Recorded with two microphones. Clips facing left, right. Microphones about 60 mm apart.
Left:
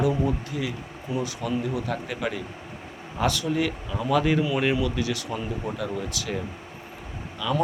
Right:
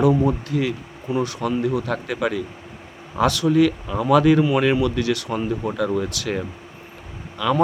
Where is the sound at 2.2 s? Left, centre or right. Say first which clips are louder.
Right 7 dB; right.